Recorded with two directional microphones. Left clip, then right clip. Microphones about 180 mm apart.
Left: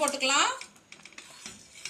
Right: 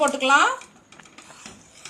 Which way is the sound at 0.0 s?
55° right (ahead or behind).